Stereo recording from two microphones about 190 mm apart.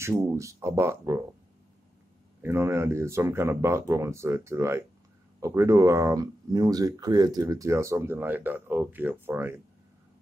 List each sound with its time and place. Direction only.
0.0 s speech: 15° right (ahead or behind)
2.4 s speech: 15° right (ahead or behind)